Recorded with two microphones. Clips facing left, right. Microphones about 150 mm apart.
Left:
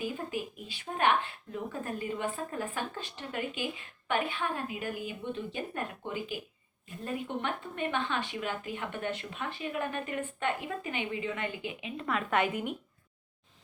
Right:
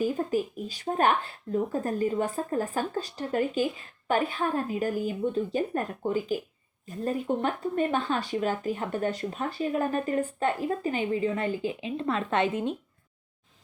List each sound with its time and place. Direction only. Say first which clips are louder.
0.0 s speech: right 8 dB; 40° right (ahead or behind)